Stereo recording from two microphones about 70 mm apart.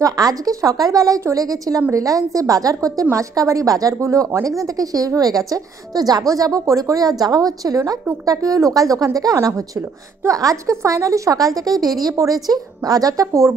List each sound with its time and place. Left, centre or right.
0.0 s a woman's voice: right